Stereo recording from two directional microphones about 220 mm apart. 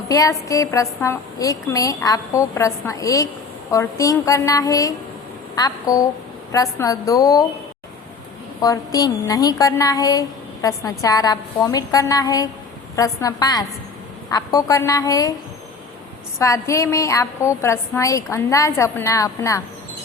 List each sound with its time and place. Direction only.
0.1 s speech: 15° left (ahead or behind)
8.6 s speech: 15° left (ahead or behind)
16.4 s speech: 15° left (ahead or behind)